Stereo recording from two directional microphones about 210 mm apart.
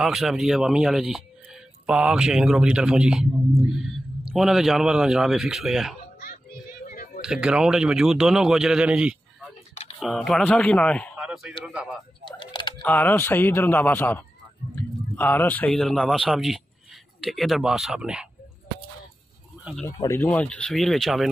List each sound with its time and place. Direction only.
0.0 s speech: centre (ahead or behind)
4.3 s speech: centre (ahead or behind)
6.8 s a sound: 40° left (ahead or behind)
7.2 s speech: 5° right (ahead or behind)
12.3 s typing: 20° left (ahead or behind)
12.8 s speech: 10° left (ahead or behind)
19.6 s speech: centre (ahead or behind)
19.9 s speech: 15° left (ahead or behind)